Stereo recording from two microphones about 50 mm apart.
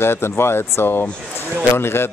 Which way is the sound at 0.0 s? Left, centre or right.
Left.